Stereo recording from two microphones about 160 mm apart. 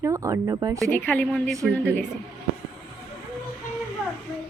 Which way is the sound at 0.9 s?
10° left (ahead or behind).